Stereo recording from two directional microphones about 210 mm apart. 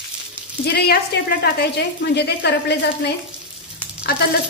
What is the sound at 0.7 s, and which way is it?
A woman's voice, 50° left (ahead or behind).